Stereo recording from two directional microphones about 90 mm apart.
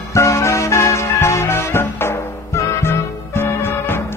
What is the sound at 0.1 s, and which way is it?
Music, 35° left (ahead or behind).